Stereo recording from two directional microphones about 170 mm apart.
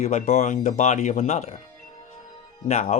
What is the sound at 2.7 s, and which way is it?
Speech, 40° left (ahead or behind).